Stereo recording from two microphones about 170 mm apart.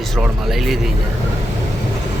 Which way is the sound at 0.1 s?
Centre (ahead or behind).